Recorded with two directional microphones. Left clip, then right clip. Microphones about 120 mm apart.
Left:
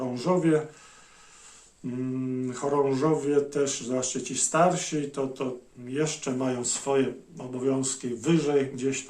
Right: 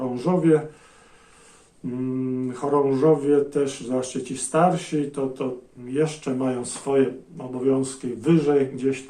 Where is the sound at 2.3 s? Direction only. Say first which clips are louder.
Right 4 dB; 35° left (ahead or behind).